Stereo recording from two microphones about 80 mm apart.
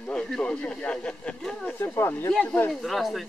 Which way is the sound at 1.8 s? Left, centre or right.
Left.